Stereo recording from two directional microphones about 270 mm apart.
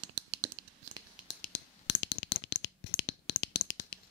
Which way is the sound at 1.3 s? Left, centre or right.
Left.